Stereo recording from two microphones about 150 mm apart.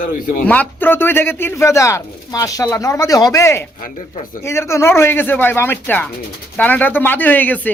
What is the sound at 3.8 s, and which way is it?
Speech, 65° left (ahead or behind).